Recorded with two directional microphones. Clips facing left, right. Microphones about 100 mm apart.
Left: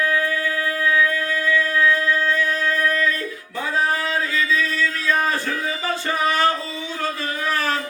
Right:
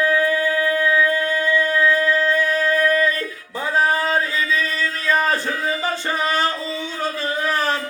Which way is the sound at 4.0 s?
40° right (ahead or behind).